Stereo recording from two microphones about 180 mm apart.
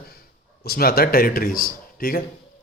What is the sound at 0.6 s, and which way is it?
Speech, 55° left (ahead or behind).